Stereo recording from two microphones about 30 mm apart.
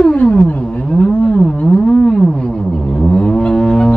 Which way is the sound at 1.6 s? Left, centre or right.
Left.